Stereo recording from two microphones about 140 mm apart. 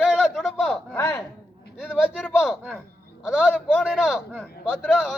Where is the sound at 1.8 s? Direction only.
5° right (ahead or behind).